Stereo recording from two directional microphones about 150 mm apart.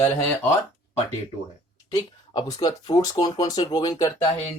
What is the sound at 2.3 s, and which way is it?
Speech, 30° left (ahead or behind).